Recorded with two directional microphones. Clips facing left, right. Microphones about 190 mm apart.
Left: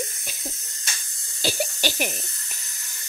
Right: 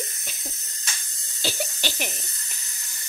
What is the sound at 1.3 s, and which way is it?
Speech, 10° left (ahead or behind).